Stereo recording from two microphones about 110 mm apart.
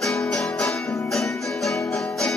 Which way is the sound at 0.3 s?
5° left (ahead or behind).